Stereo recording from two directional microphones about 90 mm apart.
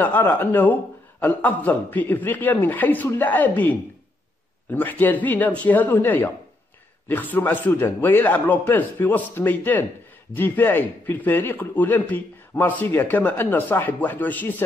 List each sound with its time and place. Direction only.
0.0 s a man's voice: 20° left (ahead or behind)